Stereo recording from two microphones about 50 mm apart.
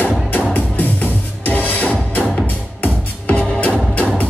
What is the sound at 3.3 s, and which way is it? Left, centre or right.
Music, left.